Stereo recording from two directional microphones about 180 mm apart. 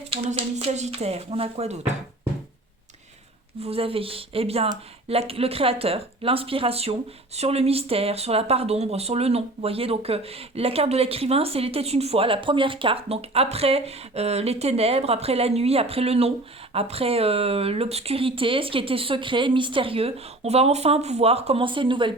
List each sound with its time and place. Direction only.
0.1 s speech: 35° right (ahead or behind)
3.6 s speech: 30° right (ahead or behind)